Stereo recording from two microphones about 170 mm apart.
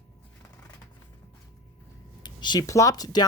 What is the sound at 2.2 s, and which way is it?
Speech, 25° left (ahead or behind).